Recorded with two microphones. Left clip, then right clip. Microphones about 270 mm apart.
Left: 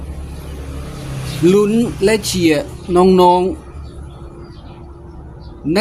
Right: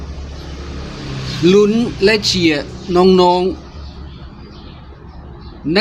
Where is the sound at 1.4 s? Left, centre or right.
Centre.